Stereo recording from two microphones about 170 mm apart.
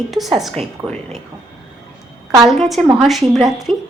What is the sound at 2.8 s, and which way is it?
Speech, 5° left (ahead or behind).